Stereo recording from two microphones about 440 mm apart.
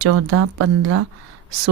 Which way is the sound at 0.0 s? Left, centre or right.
Right.